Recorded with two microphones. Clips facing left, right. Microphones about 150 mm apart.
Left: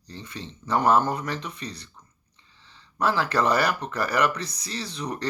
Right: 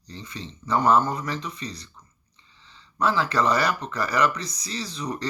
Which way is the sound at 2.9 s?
60° left (ahead or behind).